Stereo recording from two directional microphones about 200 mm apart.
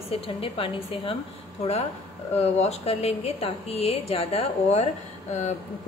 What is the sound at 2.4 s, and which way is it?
A woman's voice, 30° left (ahead or behind).